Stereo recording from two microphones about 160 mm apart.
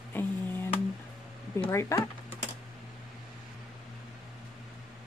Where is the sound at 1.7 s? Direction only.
15° left (ahead or behind).